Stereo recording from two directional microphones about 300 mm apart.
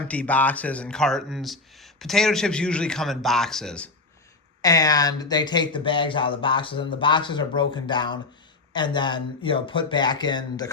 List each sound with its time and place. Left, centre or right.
0.1 s speech: centre